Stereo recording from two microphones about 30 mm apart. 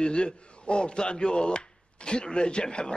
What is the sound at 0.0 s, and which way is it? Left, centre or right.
A man's voice, left.